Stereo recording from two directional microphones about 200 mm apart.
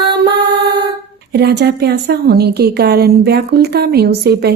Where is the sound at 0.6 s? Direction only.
55° right (ahead or behind).